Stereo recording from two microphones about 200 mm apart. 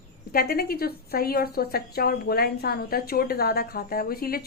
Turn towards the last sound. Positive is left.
turn(degrees=50)  # may be behind; listen again after turning